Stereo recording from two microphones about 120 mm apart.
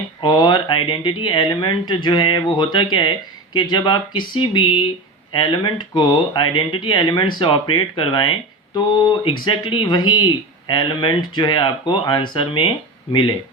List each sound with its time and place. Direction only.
0.2 s speech: 40° left (ahead or behind)